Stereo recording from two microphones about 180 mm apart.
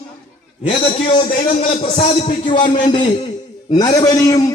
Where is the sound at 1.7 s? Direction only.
30° left (ahead or behind).